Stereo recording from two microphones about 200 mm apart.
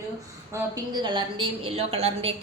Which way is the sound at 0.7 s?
20° right (ahead or behind).